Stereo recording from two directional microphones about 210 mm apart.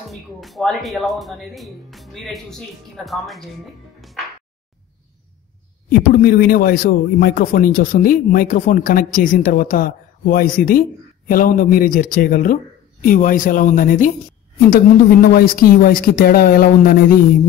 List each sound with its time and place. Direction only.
0.1 s speech: centre (ahead or behind)
5.9 s a man's voice: 45° left (ahead or behind)